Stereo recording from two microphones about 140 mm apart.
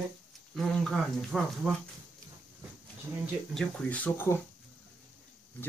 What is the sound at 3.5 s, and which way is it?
Speech, 5° left (ahead or behind).